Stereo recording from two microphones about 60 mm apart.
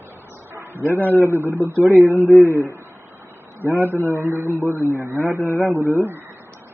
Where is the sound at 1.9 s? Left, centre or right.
Left.